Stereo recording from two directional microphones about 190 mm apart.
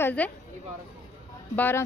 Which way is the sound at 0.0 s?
5° left (ahead or behind).